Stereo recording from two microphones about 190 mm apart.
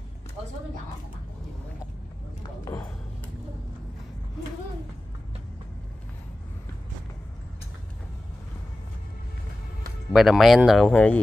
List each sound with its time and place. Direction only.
2.6 s speech: 15° left (ahead or behind)
10.1 s speech: centre (ahead or behind)